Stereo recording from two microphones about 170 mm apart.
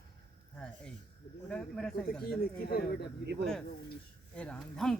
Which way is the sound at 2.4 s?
65° left (ahead or behind).